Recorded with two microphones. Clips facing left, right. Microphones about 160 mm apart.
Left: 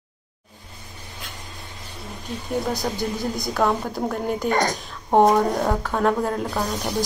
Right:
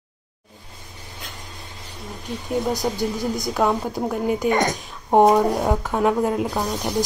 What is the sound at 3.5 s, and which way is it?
A woman's voice, 10° right (ahead or behind).